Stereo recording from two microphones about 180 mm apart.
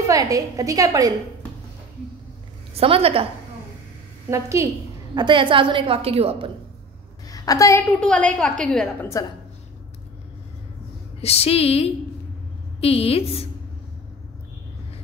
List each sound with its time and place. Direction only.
0.1 s a woman's voice: 20° right (ahead or behind)
2.7 s a woman's voice: 30° right (ahead or behind)
4.3 s a woman's voice: 15° right (ahead or behind); by 6.5 s 35° right (ahead or behind)
7.2 s a woman's voice: 20° left (ahead or behind)
7.9 s a woman's voice: 5° left (ahead or behind)
9.1 s a woman's voice: 20° left (ahead or behind)
11.1 s speech: 35° left (ahead or behind)